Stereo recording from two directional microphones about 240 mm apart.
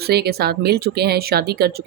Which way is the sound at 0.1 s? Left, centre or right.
Right.